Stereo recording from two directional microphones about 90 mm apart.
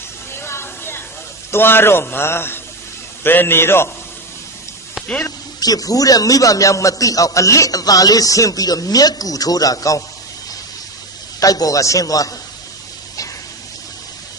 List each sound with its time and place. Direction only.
0.3 s a sound: 25° left (ahead or behind)
1.5 s a man's voice: 25° left (ahead or behind)
5.6 s a man's voice: 45° left (ahead or behind)
11.3 s a man's voice: 40° left (ahead or behind)